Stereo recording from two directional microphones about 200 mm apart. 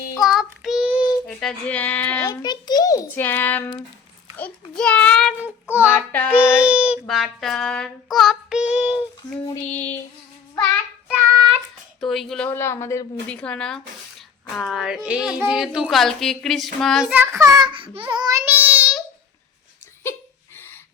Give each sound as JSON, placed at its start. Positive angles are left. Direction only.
{"t": 0.2, "sound": "child singing", "side_deg": 0}
{"t": 2.2, "sound": "a child's voice", "side_deg": 20}
{"t": 5.4, "sound": "a child's voice", "side_deg": -10}
{"t": 5.9, "sound": "a child's voice", "side_deg": 10}
{"t": 6.3, "sound": "a child's voice", "side_deg": -5}
{"t": 7.1, "sound": "child singing", "side_deg": 0}
{"t": 9.7, "sound": "a child's voice", "side_deg": 10}
{"t": 11.9, "sound": "a woman's voice", "side_deg": 0}